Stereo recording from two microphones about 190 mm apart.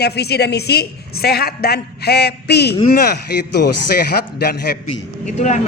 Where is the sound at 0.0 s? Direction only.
60° left (ahead or behind).